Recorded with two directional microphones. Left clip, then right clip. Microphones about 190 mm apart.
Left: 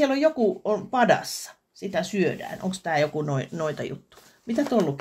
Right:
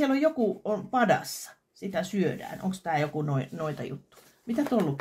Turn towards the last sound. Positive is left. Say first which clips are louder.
# left 4 dB
turn(degrees=35)  # may be behind; listen again after turning